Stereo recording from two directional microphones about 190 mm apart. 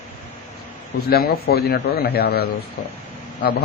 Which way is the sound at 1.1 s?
55° left (ahead or behind).